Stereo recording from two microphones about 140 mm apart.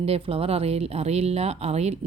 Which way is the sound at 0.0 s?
45° right (ahead or behind).